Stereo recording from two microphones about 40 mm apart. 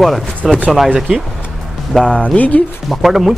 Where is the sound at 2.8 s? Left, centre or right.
Centre.